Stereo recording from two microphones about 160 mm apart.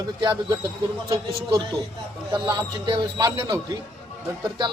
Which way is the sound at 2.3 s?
30° right (ahead or behind).